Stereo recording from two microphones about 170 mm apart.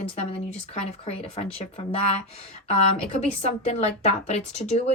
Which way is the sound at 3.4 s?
40° left (ahead or behind).